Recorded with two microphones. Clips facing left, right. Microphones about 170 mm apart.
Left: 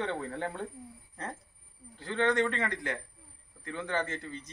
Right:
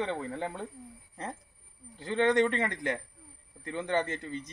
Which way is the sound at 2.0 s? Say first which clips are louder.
Right 3 dB; 15° right (ahead or behind).